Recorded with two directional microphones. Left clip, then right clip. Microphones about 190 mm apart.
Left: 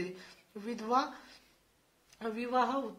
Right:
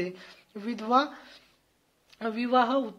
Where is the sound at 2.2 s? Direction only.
30° right (ahead or behind).